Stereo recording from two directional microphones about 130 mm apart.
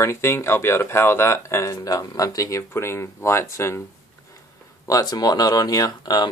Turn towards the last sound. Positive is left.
turn(degrees=30)  # may be behind; listen again after turning